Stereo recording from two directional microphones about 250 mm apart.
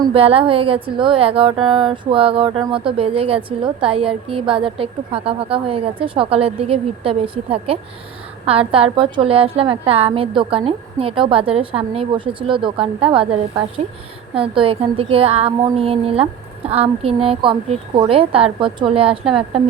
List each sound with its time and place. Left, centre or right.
0.0 s speech: right
14.3 s speech: right